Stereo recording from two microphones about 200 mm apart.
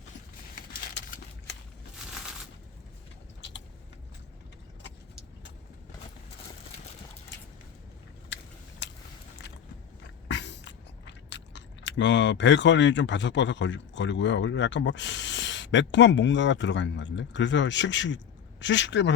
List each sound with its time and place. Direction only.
8.8 s biting: 60° left (ahead or behind)
10.2 s a woman's voice: 60° left (ahead or behind)